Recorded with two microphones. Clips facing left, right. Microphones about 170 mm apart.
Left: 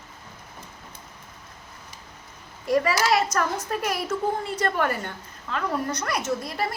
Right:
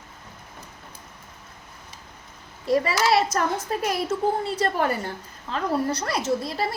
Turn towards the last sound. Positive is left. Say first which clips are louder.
# right 2 dB
turn(degrees=-25)  # may be behind; listen again after turning